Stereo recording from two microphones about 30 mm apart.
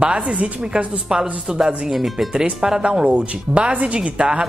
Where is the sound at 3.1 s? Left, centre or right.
Right.